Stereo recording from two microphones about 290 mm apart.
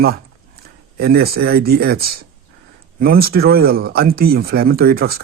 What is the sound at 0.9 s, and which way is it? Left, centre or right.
Speech, right.